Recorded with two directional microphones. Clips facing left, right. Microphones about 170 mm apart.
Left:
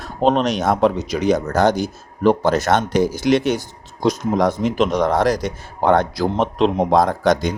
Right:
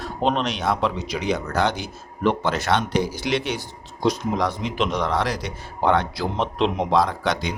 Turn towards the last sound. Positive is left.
turn(degrees=45)  # may be behind; listen again after turning